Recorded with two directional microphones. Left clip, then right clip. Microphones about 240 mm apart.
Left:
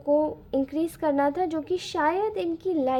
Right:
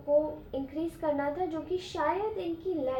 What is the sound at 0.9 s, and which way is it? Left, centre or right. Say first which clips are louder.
A woman's voice: left 6 dB; left.